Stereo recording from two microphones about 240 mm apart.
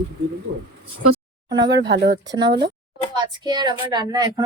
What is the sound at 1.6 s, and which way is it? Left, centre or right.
Speech, right.